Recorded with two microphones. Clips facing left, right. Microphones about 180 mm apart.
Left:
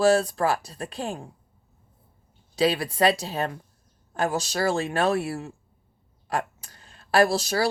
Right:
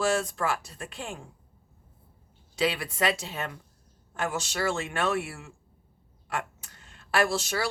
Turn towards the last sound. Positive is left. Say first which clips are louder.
# left 6 dB
turn(degrees=35)  # may be behind; listen again after turning